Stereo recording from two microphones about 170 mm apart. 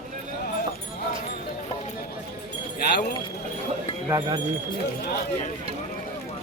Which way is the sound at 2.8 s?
70° left (ahead or behind).